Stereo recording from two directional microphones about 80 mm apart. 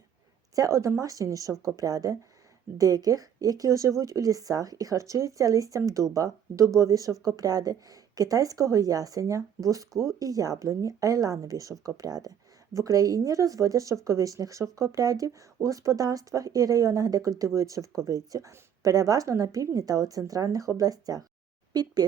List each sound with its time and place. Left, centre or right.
0.5 s speech: right